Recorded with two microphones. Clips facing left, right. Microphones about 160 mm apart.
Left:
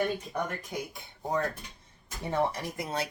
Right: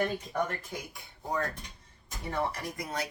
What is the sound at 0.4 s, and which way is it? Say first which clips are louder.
Speech: left 2 dB; 20° left (ahead or behind).